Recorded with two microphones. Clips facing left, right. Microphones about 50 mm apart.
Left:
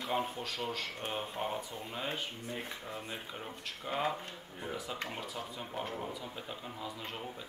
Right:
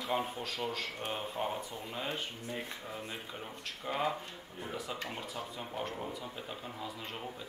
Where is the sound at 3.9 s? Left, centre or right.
Centre.